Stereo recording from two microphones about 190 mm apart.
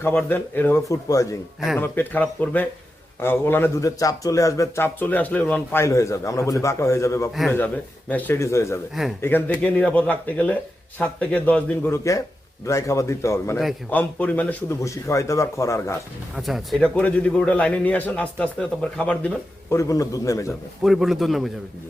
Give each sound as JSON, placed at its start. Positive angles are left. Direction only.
{"t": 0.0, "sound": "speech", "side_deg": 10}
{"t": 13.6, "sound": "a man's voice", "side_deg": 0}
{"t": 16.3, "sound": "speech", "side_deg": 0}
{"t": 19.7, "sound": "speech", "side_deg": 15}
{"t": 20.8, "sound": "a man's voice", "side_deg": 0}